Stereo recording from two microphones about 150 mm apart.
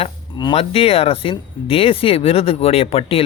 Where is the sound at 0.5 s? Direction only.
40° left (ahead or behind).